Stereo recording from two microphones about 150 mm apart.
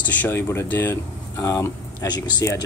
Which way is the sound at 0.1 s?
15° left (ahead or behind).